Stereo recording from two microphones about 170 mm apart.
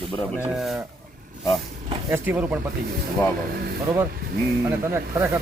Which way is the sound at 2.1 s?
10° right (ahead or behind).